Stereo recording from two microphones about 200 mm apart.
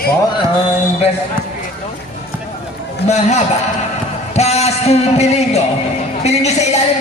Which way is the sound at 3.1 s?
35° left (ahead or behind).